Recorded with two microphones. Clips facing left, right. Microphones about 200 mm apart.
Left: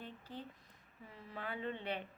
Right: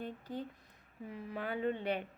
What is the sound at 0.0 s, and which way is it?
A woman's voice, 45° right (ahead or behind).